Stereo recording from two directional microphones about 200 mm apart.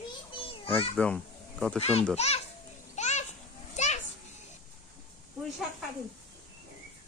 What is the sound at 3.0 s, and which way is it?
Children playing, 35° left (ahead or behind).